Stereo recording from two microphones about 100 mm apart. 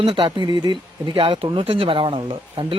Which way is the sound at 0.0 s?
50° right (ahead or behind).